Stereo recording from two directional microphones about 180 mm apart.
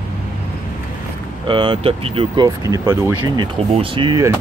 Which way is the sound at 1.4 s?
30° right (ahead or behind).